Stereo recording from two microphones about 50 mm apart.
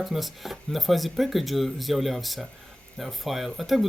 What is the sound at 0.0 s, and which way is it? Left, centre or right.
Speech, centre.